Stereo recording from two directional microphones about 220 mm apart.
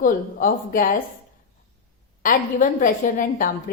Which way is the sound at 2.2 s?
35° left (ahead or behind).